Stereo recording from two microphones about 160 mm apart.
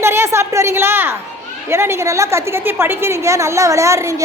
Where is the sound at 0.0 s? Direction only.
15° right (ahead or behind).